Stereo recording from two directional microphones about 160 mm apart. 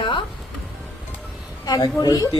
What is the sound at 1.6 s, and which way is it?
Speech, 25° left (ahead or behind).